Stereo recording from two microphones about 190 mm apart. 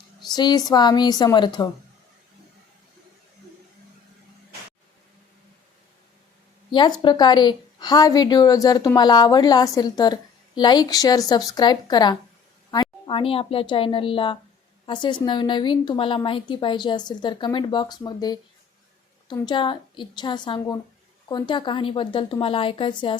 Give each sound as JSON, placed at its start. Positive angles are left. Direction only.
{"t": 0.3, "sound": "a woman's voice", "side_deg": 20}
{"t": 6.7, "sound": "a woman's voice", "side_deg": 25}